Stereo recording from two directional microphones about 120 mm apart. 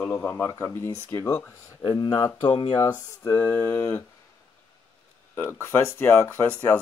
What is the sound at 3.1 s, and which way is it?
Speech, 25° left (ahead or behind).